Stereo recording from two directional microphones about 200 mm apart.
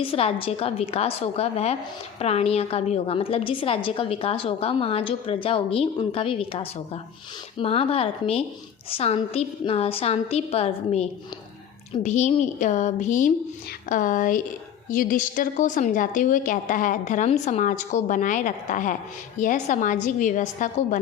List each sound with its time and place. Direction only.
0.0 s a woman's voice: 30° left (ahead or behind)